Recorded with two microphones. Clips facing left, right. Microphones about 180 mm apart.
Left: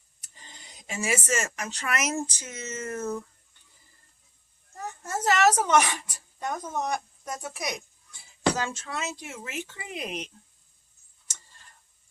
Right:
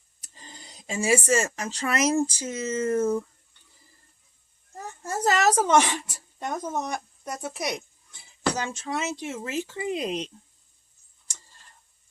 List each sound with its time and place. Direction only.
0.2 s speech: 35° right (ahead or behind)
5.0 s speech: 35° right (ahead or behind)